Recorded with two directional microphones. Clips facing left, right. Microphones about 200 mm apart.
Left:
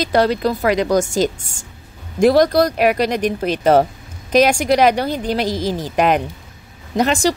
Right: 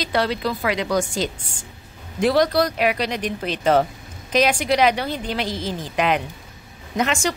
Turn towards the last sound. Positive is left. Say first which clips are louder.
# left 6 dB
turn(degrees=35)  # may be behind; listen again after turning